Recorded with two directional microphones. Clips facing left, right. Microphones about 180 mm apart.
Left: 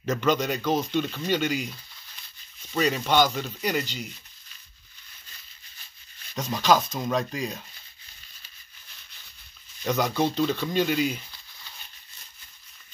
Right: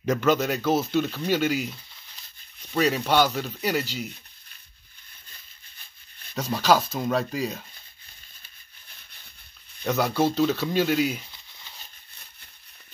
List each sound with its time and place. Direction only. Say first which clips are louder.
0.0 s speech: right 2 dB; 10° right (ahead or behind)
6.3 s speech: right 1 dB; 5° right (ahead or behind)
9.8 s speech: right 2 dB; 5° right (ahead or behind)
11.3 s crumpling: even; 20° right (ahead or behind)